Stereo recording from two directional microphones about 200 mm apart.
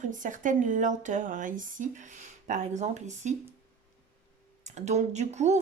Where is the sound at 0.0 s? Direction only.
40° right (ahead or behind).